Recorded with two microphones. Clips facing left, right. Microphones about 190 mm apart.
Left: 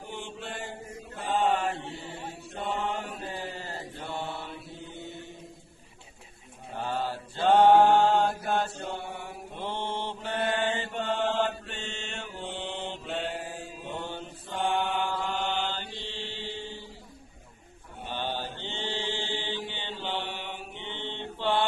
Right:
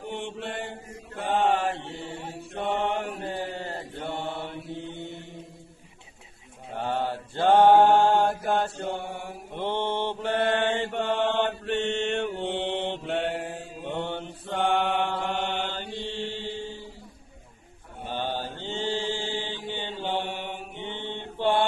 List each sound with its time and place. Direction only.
0.0 s mantra: 60° right (ahead or behind)
2.5 s mantra: 60° right (ahead or behind)
6.7 s mantra: 60° right (ahead or behind)
18.0 s mantra: 45° right (ahead or behind)